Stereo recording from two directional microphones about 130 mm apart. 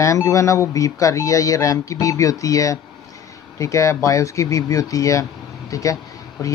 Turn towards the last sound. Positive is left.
turn(degrees=25)  # may be behind; listen again after turning